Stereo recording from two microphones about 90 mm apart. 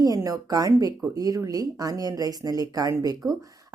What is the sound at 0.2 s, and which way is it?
A woman's voice, 40° right (ahead or behind).